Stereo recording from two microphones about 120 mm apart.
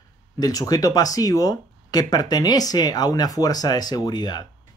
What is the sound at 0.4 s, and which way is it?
Speech, 35° left (ahead or behind).